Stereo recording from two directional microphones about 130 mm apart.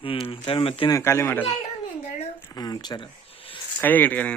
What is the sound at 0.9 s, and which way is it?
Speech, 20° left (ahead or behind).